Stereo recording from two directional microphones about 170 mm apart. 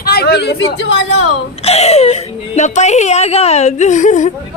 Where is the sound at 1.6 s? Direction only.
40° left (ahead or behind).